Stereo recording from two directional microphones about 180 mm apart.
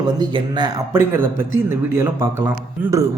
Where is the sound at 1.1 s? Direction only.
10° right (ahead or behind).